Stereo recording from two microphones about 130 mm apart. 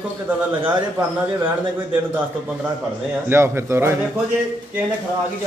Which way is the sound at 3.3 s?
20° right (ahead or behind).